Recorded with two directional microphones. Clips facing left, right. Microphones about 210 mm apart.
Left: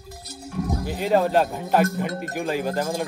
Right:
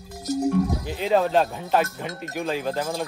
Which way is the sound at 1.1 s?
10° left (ahead or behind).